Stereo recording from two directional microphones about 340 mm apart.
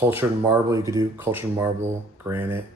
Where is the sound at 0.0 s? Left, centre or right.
Centre.